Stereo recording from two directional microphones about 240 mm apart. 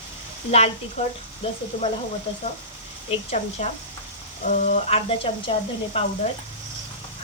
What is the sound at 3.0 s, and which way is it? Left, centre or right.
Speech, left.